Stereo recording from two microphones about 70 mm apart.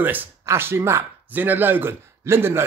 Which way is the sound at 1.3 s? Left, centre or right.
Right.